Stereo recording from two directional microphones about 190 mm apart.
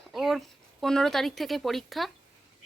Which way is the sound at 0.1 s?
Centre (ahead or behind).